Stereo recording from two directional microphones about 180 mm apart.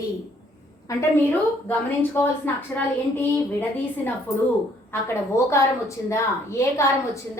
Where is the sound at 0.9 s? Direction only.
20° left (ahead or behind).